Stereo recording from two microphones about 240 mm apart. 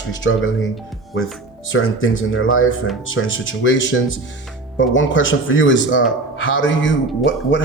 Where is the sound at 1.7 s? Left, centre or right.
Left.